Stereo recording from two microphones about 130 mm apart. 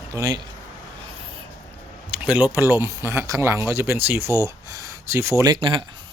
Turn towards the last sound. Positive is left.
turn(degrees=-40)  # may be behind; listen again after turning